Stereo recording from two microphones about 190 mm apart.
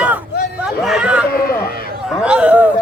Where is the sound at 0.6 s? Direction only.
5° right (ahead or behind).